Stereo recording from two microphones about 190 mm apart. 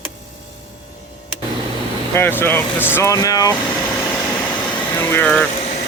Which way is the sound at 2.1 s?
10° left (ahead or behind).